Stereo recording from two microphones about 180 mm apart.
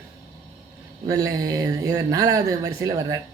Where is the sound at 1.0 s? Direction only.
20° right (ahead or behind).